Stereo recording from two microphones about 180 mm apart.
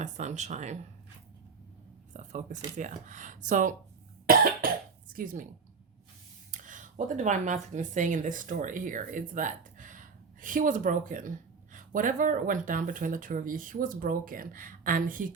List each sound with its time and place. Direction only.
0.0 s speech: 40° right (ahead or behind)
2.1 s speech: 45° right (ahead or behind)
4.3 s cough: 55° right (ahead or behind)
4.6 s speech: 55° right (ahead or behind)
6.5 s speech: 45° right (ahead or behind)